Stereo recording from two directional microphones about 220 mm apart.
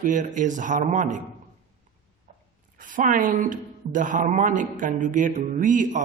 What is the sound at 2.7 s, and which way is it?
Speech, 35° right (ahead or behind).